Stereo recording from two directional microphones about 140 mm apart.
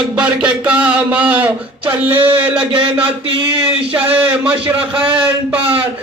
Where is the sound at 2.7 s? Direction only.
40° right (ahead or behind).